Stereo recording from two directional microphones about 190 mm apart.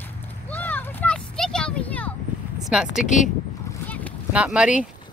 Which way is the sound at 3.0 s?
40° left (ahead or behind).